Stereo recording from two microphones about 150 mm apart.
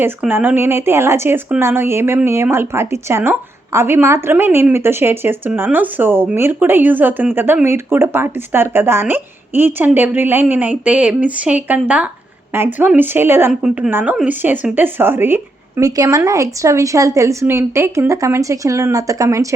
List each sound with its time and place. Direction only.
0.0 s speech: 15° right (ahead or behind)